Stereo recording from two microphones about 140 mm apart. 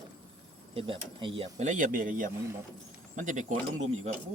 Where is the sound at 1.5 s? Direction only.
60° right (ahead or behind).